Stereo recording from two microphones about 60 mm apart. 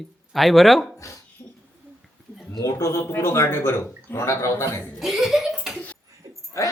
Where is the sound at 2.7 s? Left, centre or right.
Left.